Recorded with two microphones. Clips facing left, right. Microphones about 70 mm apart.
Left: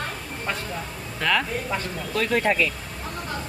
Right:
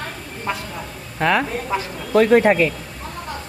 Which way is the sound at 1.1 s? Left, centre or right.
Right.